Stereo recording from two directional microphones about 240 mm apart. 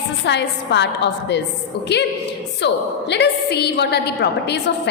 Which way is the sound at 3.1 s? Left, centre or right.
Left.